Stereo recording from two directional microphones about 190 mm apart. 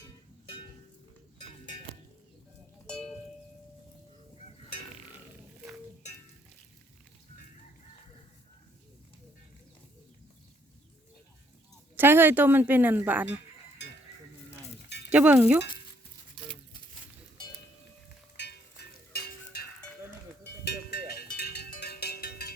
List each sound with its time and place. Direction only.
2.8 s music: 5° left (ahead or behind)
11.9 s a woman's voice: 10° right (ahead or behind)
15.1 s a woman's voice: 5° right (ahead or behind)
18.3 s music: 60° left (ahead or behind)
19.1 s stir: 55° left (ahead or behind)
20.7 s cowbell: 55° left (ahead or behind)